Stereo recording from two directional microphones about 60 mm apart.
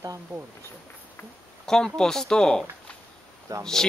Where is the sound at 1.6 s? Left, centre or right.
Centre.